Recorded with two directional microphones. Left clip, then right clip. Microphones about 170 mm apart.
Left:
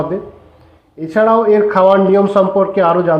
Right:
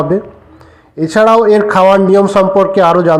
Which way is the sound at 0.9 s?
20° right (ahead or behind).